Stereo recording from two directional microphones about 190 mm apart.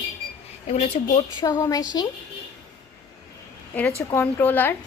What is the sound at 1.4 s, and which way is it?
Speech, 20° left (ahead or behind).